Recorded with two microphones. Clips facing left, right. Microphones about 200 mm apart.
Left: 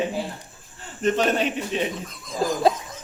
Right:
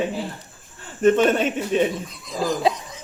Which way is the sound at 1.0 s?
50° right (ahead or behind).